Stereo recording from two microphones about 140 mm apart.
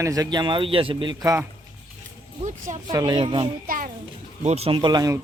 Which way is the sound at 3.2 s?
45° right (ahead or behind).